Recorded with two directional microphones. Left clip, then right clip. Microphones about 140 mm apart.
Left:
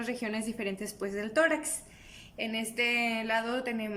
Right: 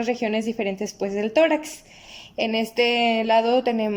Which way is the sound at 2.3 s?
35° right (ahead or behind).